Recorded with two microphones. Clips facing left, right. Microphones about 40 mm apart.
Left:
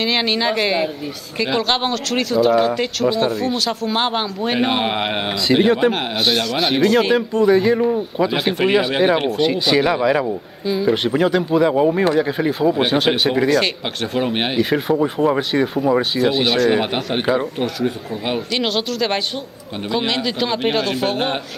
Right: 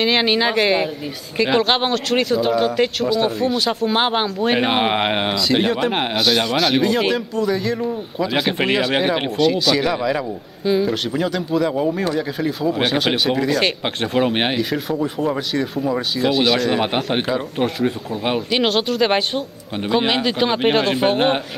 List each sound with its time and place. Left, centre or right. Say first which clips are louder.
0.0 s speech: right 2 dB; centre
5.3 s speech: left 3 dB; centre
7.5 s speech: left 6 dB; centre
8.3 s speech: even; centre
9.4 s speech: even; centre
10.6 s speech: right 4 dB; centre
10.9 s speech: left 5 dB; centre
12.8 s speech: left 2 dB; centre
13.5 s speech: left 1 dB; centre
14.6 s speech: left 4 dB; centre